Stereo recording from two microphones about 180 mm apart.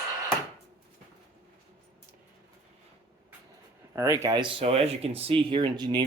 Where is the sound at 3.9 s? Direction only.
15° right (ahead or behind).